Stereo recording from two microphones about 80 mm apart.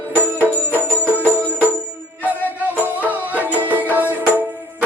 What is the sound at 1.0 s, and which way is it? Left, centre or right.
Music, right.